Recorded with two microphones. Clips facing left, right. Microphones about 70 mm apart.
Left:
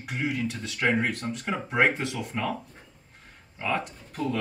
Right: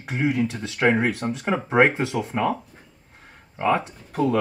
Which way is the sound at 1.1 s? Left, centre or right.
Centre.